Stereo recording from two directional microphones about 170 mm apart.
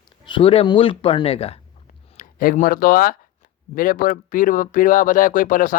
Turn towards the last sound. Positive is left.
turn(degrees=50)  # may be behind; listen again after turning